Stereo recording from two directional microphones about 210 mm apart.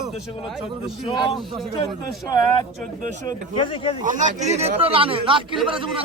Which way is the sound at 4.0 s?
35° right (ahead or behind).